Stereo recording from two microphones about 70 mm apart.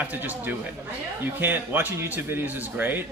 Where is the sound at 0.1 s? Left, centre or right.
Right.